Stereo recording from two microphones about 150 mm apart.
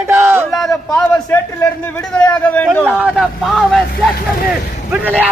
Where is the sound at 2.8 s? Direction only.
5° right (ahead or behind).